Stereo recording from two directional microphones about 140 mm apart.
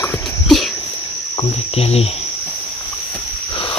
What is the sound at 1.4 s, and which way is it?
Speech, 45° left (ahead or behind).